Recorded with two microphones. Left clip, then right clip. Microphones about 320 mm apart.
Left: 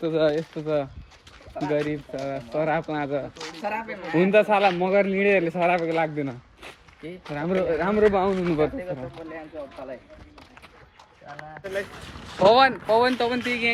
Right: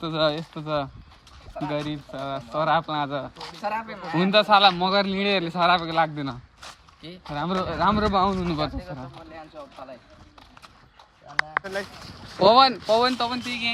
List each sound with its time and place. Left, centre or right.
0.0 s a man's voice: centre
11.6 s speech: centre
12.5 s speech: right
13.0 s speech: centre